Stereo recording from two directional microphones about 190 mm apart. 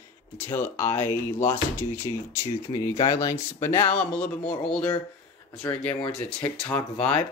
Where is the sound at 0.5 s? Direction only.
10° left (ahead or behind).